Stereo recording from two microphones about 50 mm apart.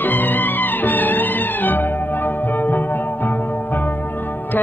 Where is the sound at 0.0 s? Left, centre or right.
Left.